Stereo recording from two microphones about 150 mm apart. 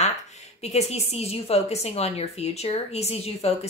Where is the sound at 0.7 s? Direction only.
45° left (ahead or behind).